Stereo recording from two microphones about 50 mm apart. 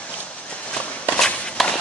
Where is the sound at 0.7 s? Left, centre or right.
Left.